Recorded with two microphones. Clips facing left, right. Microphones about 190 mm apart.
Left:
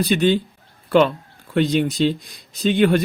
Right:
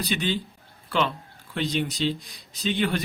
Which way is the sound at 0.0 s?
50° left (ahead or behind).